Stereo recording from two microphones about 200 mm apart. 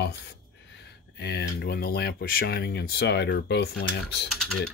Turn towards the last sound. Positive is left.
turn(degrees=0)  # may be behind; listen again after turning